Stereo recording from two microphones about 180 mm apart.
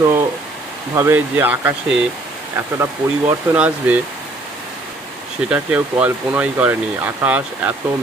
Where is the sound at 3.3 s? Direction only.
10° right (ahead or behind).